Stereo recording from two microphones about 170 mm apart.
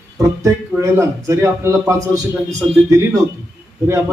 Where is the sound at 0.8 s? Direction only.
15° right (ahead or behind).